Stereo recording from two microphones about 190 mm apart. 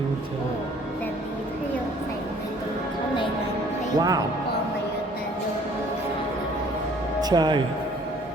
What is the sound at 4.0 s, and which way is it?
Speech, 20° right (ahead or behind).